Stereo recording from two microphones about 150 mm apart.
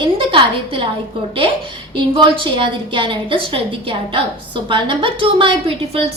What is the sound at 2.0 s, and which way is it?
A woman's voice, 30° right (ahead or behind).